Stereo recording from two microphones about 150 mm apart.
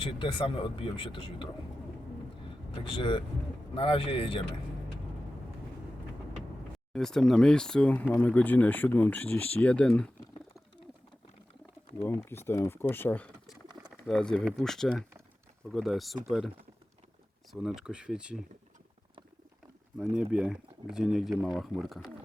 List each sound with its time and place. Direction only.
0.0 s speech: 35° left (ahead or behind)
2.9 s speech: 35° left (ahead or behind)
6.9 s speech: 5° left (ahead or behind)
12.0 s speech: 15° left (ahead or behind); by 16.1 s centre (ahead or behind)
17.5 s speech: 5° right (ahead or behind)
20.3 s speech: 5° right (ahead or behind)